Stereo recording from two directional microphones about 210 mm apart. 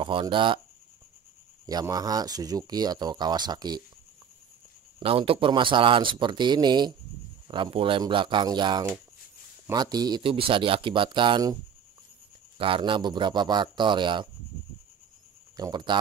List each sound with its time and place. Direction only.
0.0 s speech: 25° right (ahead or behind)
1.7 s speech: 20° right (ahead or behind)
5.0 s speech: 25° right (ahead or behind)
12.5 s speech: 25° right (ahead or behind)
15.5 s speech: 20° right (ahead or behind)